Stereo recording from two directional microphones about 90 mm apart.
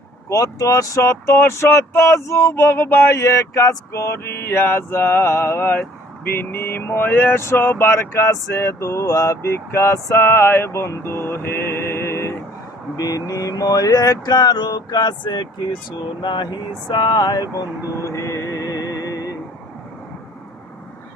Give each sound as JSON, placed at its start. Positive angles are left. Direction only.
{"t": 0.3, "sound": "speech", "side_deg": 40}
{"t": 13.0, "sound": "mantra", "side_deg": 40}